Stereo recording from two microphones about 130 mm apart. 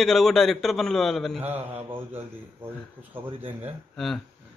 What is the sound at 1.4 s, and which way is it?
Speech, 15° right (ahead or behind).